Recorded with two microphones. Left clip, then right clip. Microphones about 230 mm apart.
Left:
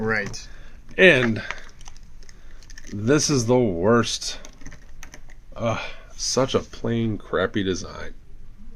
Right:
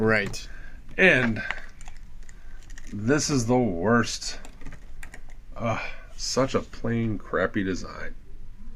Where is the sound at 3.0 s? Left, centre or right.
Left.